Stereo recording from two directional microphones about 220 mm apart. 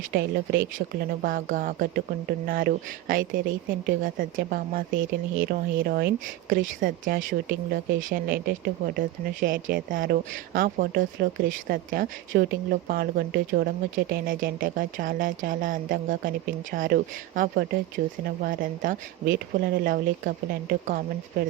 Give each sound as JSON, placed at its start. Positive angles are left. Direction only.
{"t": 0.1, "sound": "a woman's voice", "side_deg": -45}